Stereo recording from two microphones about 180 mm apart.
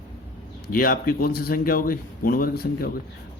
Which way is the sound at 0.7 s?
50° left (ahead or behind).